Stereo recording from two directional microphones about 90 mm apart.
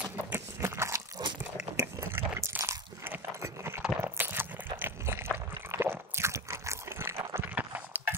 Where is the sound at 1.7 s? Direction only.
30° right (ahead or behind).